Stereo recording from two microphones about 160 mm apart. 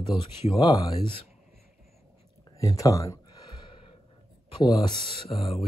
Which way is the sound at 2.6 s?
20° left (ahead or behind).